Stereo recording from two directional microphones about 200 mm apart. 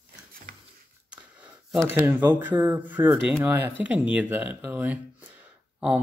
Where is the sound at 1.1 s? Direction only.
5° right (ahead or behind).